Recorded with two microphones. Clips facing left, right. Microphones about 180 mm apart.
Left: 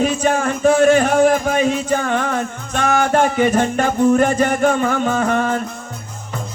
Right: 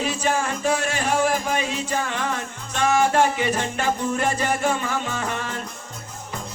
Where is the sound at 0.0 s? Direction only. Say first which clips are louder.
Left 7 dB; 55° left (ahead or behind).